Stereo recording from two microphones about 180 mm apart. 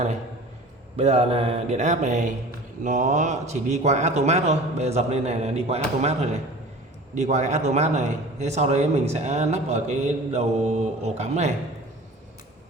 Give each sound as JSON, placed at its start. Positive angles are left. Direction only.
{"t": 0.9, "sound": "a man's voice", "side_deg": -35}